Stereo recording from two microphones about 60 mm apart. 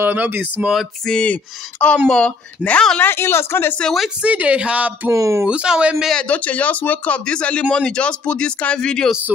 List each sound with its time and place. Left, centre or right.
0.0 s speech: right
1.0 s speech: centre
3.0 s speech: left
4.2 s a woman's voice: right
5.1 s speech: right
5.5 s a woman's voice: centre
6.1 s speech: left